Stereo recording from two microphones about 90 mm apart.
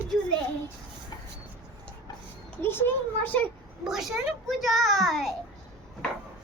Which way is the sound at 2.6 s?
25° left (ahead or behind).